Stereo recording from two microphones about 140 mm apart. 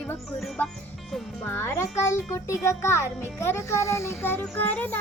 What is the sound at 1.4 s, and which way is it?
A child's voice, 15° left (ahead or behind).